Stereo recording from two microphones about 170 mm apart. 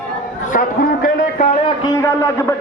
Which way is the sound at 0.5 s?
50° left (ahead or behind).